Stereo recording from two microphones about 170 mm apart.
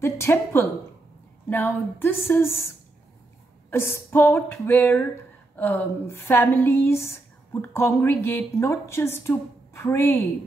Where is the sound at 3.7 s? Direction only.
15° left (ahead or behind).